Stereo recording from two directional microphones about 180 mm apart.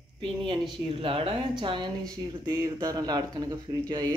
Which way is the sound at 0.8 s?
30° right (ahead or behind).